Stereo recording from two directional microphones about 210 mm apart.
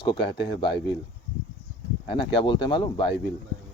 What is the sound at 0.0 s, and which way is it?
Speech, 25° left (ahead or behind).